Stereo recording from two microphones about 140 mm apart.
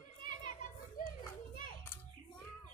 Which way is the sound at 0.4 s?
65° left (ahead or behind).